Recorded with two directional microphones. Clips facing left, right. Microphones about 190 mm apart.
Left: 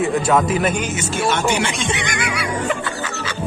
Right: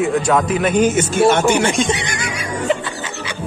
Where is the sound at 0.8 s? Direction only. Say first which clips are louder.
Right 8 dB; 55° right (ahead or behind); by 2.3 s 35° right (ahead or behind).